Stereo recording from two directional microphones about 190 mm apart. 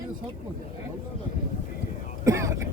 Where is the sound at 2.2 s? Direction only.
15° right (ahead or behind).